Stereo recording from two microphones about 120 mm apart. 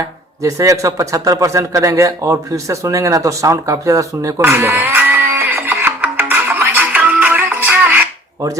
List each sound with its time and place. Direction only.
0.4 s a man's voice: 25° right (ahead or behind)